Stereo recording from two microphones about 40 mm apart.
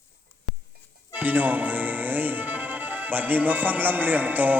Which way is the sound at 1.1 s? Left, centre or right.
Right.